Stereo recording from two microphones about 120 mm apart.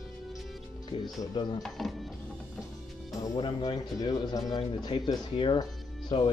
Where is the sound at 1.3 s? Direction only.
35° left (ahead or behind).